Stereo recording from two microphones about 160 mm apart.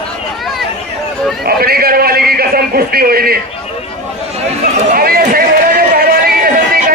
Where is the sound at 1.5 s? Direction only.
70° right (ahead or behind).